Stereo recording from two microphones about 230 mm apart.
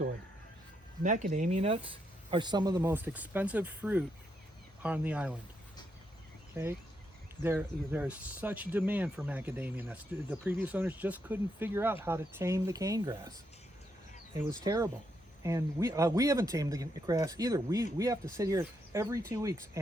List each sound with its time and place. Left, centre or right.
1.0 s speech: right; by 5.4 s centre
7.4 s speech: centre
14.6 s speech: centre